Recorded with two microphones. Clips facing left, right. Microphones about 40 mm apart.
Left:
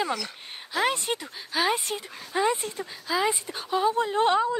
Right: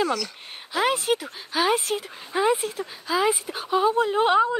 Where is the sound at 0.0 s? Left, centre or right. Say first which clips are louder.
Right 4 dB; centre.